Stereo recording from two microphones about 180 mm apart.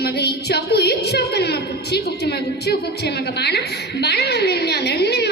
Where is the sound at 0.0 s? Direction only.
65° left (ahead or behind).